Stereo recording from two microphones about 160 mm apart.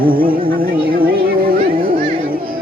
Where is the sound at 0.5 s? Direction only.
65° right (ahead or behind).